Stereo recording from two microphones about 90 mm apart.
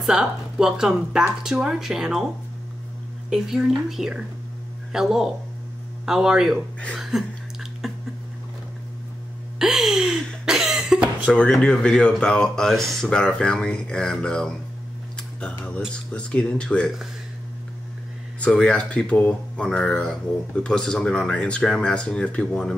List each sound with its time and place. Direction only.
0.0 s speech: 5° right (ahead or behind)
3.3 s speech: 5° right (ahead or behind)
9.6 s a sound: 5° right (ahead or behind)
11.6 s speech: 10° left (ahead or behind)
15.9 s speech: 10° left (ahead or behind)
18.4 s speech: 15° left (ahead or behind)